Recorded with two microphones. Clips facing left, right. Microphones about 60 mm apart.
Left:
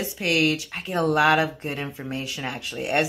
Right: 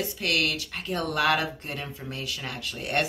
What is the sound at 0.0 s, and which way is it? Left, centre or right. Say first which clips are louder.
Speech: left 4 dB; centre.